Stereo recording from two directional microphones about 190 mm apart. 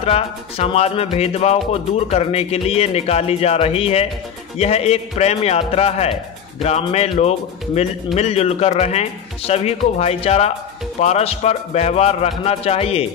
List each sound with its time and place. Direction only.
0.0 s music: 30° left (ahead or behind)